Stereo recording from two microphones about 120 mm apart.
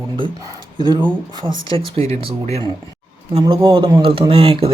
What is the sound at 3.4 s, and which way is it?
Speech, 45° right (ahead or behind).